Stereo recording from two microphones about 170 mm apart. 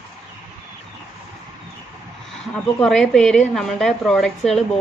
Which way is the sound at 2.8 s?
Centre (ahead or behind).